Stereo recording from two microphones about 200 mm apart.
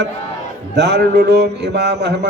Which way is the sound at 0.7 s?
55° right (ahead or behind).